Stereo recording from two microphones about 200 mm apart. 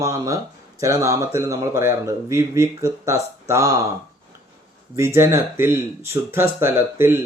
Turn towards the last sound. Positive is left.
turn(degrees=-10)  # may be behind; listen again after turning